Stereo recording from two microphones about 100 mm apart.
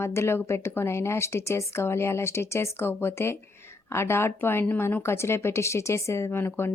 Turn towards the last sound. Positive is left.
turn(degrees=25)  # may be behind; listen again after turning